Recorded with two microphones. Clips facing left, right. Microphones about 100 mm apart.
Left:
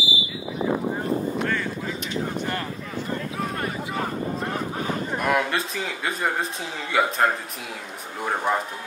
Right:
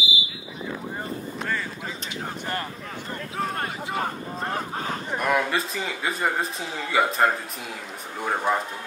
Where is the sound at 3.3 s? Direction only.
40° right (ahead or behind).